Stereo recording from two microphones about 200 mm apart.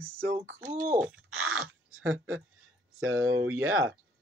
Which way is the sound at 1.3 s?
90° right.